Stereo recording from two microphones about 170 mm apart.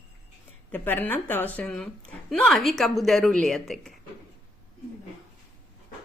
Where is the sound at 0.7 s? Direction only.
10° left (ahead or behind).